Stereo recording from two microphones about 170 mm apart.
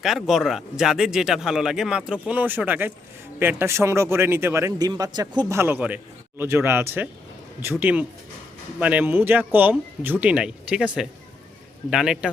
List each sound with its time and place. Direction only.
0.0 s a man's voice: centre (ahead or behind)
11.9 s speech: 5° right (ahead or behind)